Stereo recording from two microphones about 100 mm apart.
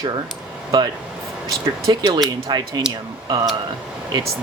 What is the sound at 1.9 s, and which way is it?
Speech, 40° right (ahead or behind).